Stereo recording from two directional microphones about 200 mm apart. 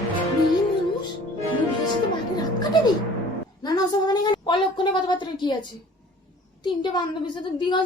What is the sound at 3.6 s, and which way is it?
A woman's voice, 20° left (ahead or behind).